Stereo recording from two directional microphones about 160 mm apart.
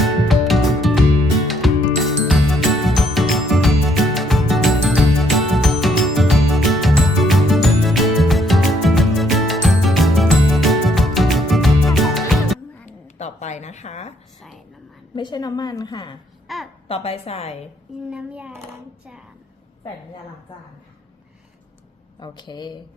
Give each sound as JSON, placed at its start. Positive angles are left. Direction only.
{"t": 0.0, "sound": "music", "side_deg": 0}
{"t": 12.8, "sound": "a sound", "side_deg": 45}
{"t": 15.1, "sound": "a woman's voice", "side_deg": 30}
{"t": 16.5, "sound": "a sound", "side_deg": 0}
{"t": 16.9, "sound": "a woman's voice", "side_deg": 40}
{"t": 18.1, "sound": "a child's voice", "side_deg": -10}
{"t": 22.2, "sound": "speech", "side_deg": 30}